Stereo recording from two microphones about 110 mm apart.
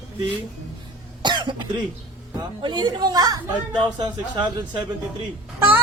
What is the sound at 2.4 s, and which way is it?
Speech, 45° right (ahead or behind).